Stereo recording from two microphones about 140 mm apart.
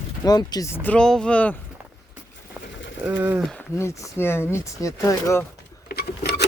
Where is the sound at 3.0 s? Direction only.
10° right (ahead or behind).